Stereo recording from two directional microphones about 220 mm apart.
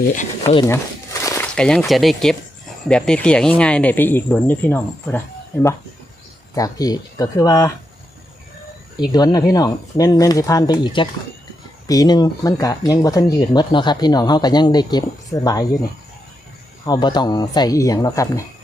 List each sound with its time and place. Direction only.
0.4 s speech: 15° left (ahead or behind)
6.5 s speech: 15° left (ahead or behind)
9.0 s speech: 20° left (ahead or behind)
16.8 s speech: 20° left (ahead or behind)